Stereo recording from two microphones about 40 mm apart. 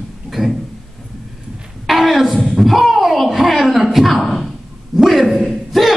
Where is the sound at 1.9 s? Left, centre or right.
Centre.